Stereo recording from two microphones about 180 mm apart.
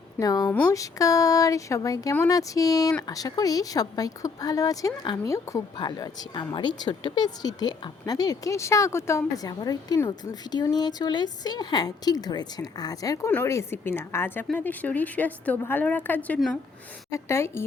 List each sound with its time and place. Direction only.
0.2 s a woman's voice: 20° left (ahead or behind); by 16.6 s 5° left (ahead or behind)
17.1 s a woman's voice: 15° left (ahead or behind)